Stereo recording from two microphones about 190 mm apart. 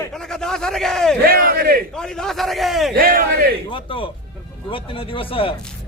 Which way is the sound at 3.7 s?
25° left (ahead or behind).